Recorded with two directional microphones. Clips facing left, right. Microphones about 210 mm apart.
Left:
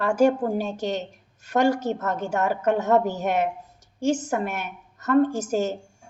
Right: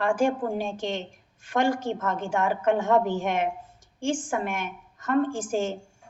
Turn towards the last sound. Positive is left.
turn(degrees=40)  # may be behind; listen again after turning